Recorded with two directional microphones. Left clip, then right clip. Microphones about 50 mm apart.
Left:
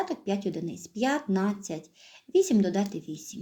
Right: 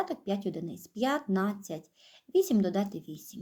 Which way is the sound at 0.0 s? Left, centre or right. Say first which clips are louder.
Left 2 dB; right.